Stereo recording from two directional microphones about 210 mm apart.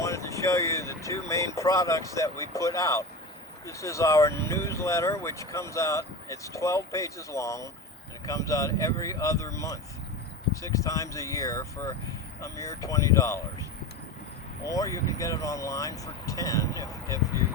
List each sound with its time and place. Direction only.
0.0 s vehicle: 15° left (ahead or behind)
1.5 s speech: 15° left (ahead or behind)
14.7 s speech: 15° left (ahead or behind)